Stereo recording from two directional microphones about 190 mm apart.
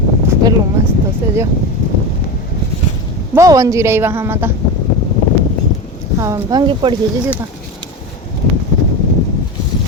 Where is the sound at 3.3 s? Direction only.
15° right (ahead or behind).